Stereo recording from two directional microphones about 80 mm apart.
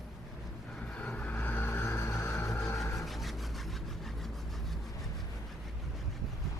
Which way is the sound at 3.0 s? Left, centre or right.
Centre.